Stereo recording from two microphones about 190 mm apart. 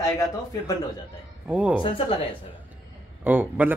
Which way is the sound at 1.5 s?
5° right (ahead or behind).